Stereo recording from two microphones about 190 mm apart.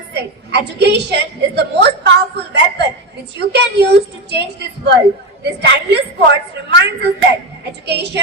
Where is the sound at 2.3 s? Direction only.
60° right (ahead or behind).